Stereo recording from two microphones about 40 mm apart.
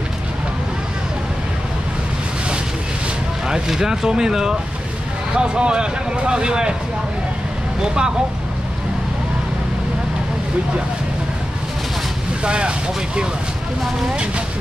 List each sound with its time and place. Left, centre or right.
3.4 s speech: centre
7.8 s speech: centre
12.4 s speech: right